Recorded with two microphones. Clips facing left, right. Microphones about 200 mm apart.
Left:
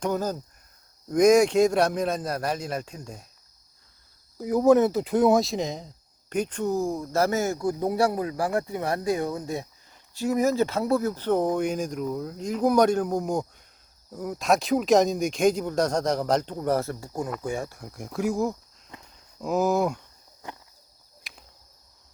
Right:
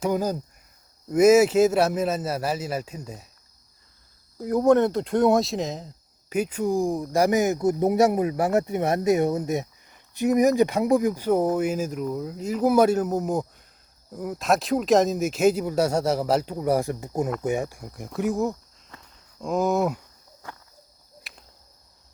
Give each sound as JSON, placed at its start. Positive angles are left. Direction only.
{"t": 0.0, "sound": "speech", "side_deg": -10}
{"t": 4.4, "sound": "speech", "side_deg": 0}
{"t": 17.8, "sound": "speech", "side_deg": 0}
{"t": 18.9, "sound": "walk", "side_deg": 15}
{"t": 19.4, "sound": "speech", "side_deg": 5}
{"t": 21.2, "sound": "cricket", "side_deg": 0}